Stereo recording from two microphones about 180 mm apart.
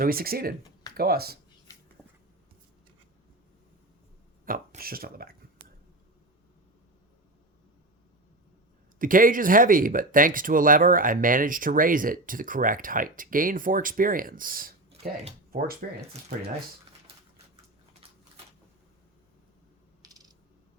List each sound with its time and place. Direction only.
0.0 s speech: 55° right (ahead or behind)
4.4 s speech: 50° right (ahead or behind)
9.0 s speech: 50° right (ahead or behind)
17.1 s typewriter: 30° right (ahead or behind)
20.0 s coin: 20° right (ahead or behind)